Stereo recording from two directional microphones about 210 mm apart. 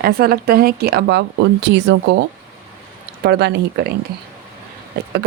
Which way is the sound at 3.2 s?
55° right (ahead or behind).